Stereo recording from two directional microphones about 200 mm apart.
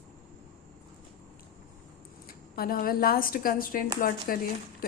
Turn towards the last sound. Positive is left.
turn(degrees=45)  # may be behind; listen again after turning